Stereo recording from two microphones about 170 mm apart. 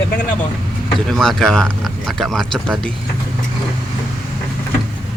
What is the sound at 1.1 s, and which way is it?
Speech, centre (ahead or behind).